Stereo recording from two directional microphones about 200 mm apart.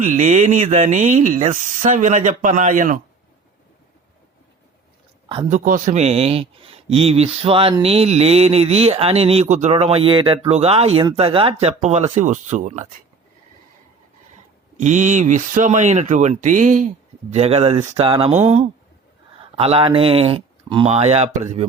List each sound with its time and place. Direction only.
0.0 s speech: 40° right (ahead or behind)
5.5 s a man's voice: 40° right (ahead or behind)
14.8 s speech: 35° right (ahead or behind)
19.5 s a man's voice: 30° right (ahead or behind)